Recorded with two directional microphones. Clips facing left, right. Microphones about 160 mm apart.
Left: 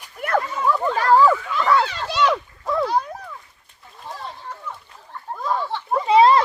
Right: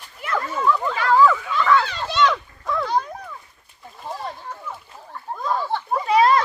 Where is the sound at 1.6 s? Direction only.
35° left (ahead or behind).